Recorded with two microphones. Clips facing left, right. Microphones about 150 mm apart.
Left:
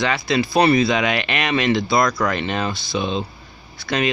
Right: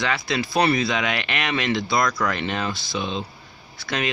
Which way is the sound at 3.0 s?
30° left (ahead or behind).